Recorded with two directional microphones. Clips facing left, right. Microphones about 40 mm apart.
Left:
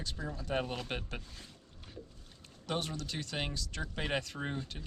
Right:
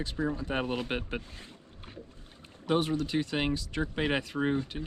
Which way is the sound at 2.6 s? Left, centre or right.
Right.